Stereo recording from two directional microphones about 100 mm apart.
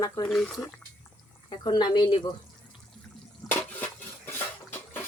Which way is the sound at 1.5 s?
50° left (ahead or behind).